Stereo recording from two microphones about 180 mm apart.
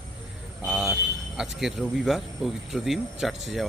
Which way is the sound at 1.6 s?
Centre (ahead or behind).